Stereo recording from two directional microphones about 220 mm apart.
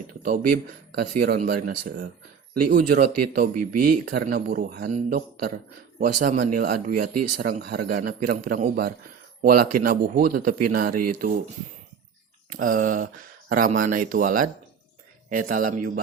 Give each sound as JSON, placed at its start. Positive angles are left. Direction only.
{"t": 0.1, "sound": "a man's voice", "side_deg": -40}
{"t": 12.5, "sound": "a man's voice", "side_deg": -40}